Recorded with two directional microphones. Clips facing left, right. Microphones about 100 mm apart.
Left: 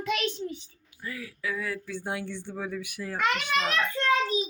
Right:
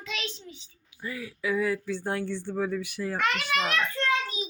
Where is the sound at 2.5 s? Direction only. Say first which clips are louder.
Right 5 dB; 5° right (ahead or behind).